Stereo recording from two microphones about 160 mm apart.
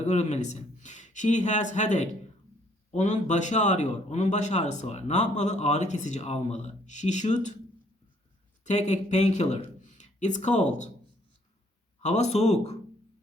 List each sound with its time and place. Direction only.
0.0 s speech: 45° left (ahead or behind)
8.6 s speech: 45° left (ahead or behind)
12.0 s speech: 45° left (ahead or behind)